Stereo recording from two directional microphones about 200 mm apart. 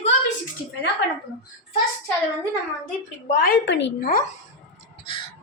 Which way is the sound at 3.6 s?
60° left (ahead or behind).